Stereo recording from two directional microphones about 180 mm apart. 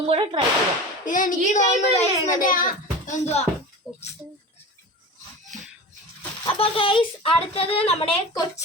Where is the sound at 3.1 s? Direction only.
35° left (ahead or behind).